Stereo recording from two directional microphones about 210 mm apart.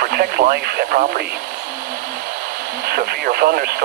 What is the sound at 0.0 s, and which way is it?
Speech, 45° right (ahead or behind).